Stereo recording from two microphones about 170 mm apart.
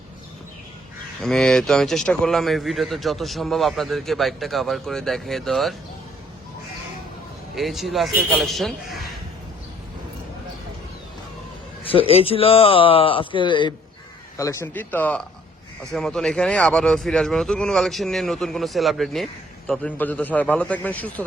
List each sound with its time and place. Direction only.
1.2 s speech: 5° left (ahead or behind)
7.5 s speech: centre (ahead or behind)
11.8 s speech: 30° left (ahead or behind); by 21.2 s 10° left (ahead or behind)